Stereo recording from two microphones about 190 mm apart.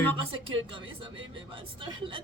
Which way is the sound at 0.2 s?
30° right (ahead or behind).